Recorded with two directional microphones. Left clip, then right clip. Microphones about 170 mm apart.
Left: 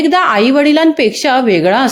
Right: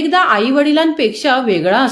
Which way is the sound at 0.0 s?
45° left (ahead or behind).